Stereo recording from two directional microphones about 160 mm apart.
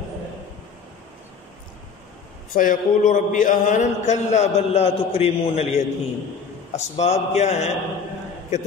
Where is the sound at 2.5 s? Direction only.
55° left (ahead or behind).